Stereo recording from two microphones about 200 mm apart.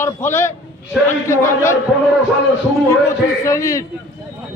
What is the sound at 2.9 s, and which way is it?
Speech, 15° left (ahead or behind).